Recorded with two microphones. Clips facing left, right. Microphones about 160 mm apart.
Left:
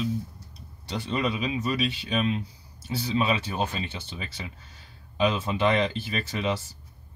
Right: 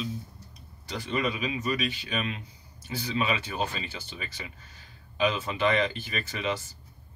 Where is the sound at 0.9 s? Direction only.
25° left (ahead or behind).